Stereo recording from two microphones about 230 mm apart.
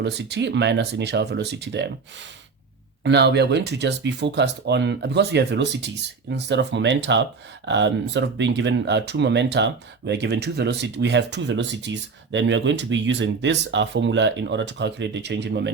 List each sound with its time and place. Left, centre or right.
0.0 s speech: right
3.0 s speech: right